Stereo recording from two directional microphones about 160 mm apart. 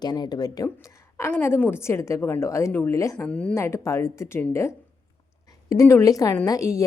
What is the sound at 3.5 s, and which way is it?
A woman's voice, 15° left (ahead or behind).